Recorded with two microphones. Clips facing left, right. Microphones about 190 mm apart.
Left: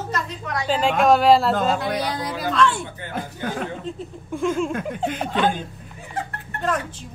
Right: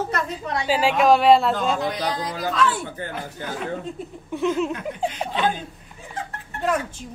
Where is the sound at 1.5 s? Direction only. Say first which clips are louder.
Left 2 dB; 55° left (ahead or behind).